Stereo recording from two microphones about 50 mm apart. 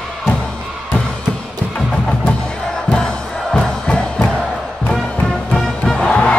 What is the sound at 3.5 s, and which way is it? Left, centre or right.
Music, centre.